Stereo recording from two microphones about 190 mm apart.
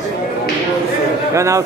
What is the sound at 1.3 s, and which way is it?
Speech, 15° right (ahead or behind).